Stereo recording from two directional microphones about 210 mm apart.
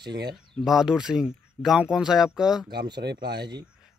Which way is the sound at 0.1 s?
50° right (ahead or behind).